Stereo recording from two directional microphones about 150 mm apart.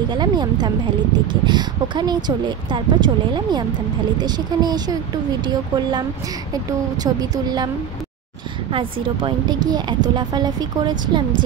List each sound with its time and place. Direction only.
0.1 s speech: 30° right (ahead or behind)
8.7 s speech: 35° right (ahead or behind)